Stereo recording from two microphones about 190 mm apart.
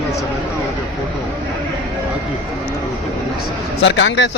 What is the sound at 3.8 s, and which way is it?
Speech, 70° left (ahead or behind).